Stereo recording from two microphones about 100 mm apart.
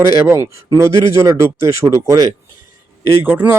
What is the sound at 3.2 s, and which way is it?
Speech, 20° right (ahead or behind).